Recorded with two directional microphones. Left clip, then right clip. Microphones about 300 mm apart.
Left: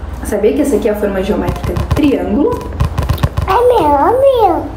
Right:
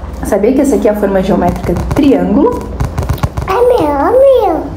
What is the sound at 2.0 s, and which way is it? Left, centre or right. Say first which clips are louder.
Speech: right 3 dB; right.